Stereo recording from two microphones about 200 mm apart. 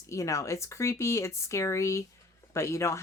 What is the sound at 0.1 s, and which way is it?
Speech, 15° left (ahead or behind).